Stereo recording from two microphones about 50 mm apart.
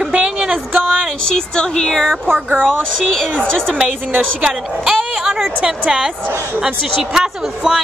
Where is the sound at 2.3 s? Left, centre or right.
Right.